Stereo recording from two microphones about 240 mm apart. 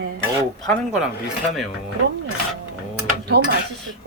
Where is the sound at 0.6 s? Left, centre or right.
Centre.